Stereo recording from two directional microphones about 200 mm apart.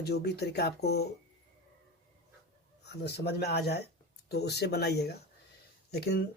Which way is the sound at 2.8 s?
55° left (ahead or behind).